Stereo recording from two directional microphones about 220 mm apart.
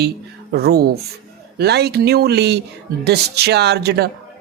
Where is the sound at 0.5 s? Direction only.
45° right (ahead or behind).